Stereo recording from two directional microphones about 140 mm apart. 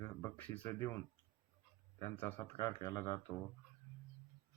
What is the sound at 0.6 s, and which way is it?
Speech, 25° left (ahead or behind).